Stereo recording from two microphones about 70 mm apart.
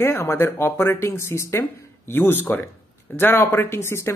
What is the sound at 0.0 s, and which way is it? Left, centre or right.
Speech, left.